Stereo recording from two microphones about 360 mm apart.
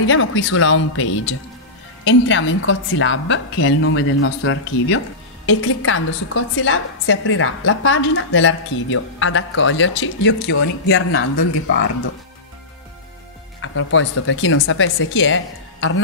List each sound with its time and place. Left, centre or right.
0.0 s a woman's voice: left
13.6 s a woman's voice: left